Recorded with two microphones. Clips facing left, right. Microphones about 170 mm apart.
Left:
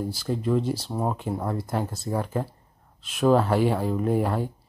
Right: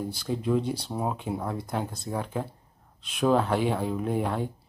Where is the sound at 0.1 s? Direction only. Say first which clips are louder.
Even; centre (ahead or behind).